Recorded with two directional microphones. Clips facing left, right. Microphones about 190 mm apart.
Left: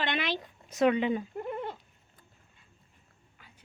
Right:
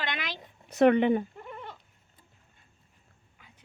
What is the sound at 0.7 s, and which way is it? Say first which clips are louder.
Speech: right 4 dB; 60° right (ahead or behind).